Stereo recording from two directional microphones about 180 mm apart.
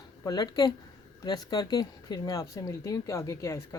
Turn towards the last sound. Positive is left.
turn(degrees=15)  # may be behind; listen again after turning